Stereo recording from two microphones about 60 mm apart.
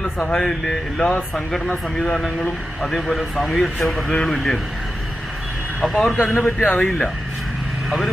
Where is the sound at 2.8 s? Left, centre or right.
Centre.